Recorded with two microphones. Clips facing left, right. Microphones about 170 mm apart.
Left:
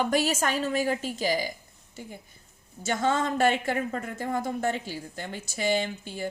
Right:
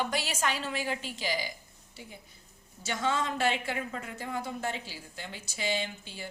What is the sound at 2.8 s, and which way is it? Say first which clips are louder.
Speech: left 5 dB; 50° left (ahead or behind).